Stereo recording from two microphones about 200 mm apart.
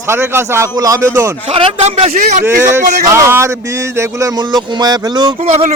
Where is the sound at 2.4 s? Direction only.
15° right (ahead or behind).